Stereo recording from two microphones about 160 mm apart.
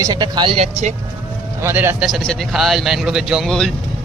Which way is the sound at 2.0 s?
Centre (ahead or behind).